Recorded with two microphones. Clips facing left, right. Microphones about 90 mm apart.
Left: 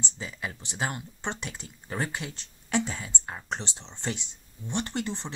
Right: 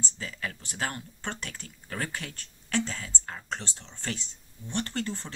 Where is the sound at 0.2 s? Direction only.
20° left (ahead or behind).